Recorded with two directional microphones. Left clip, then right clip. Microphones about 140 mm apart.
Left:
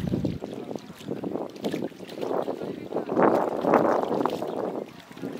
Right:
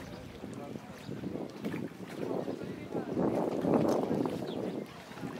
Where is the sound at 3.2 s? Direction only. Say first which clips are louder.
Left 10 dB; 35° left (ahead or behind).